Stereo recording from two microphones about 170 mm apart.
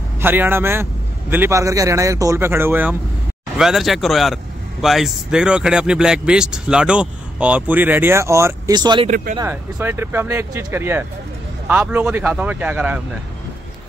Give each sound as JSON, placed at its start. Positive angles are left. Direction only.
{"t": 0.2, "sound": "speech", "side_deg": -10}
{"t": 9.4, "sound": "speech", "side_deg": -10}